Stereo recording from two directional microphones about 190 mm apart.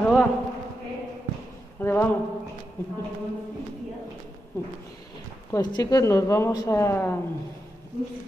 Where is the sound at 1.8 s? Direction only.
10° left (ahead or behind).